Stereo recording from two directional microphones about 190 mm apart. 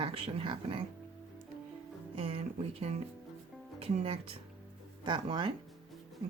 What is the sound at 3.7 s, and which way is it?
Speech, 30° right (ahead or behind).